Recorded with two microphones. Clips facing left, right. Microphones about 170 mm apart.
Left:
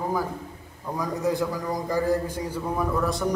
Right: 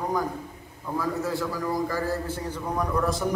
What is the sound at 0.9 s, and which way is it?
A man's voice, 15° left (ahead or behind).